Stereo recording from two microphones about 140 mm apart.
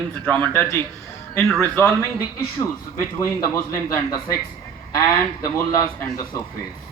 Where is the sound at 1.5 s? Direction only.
Centre (ahead or behind).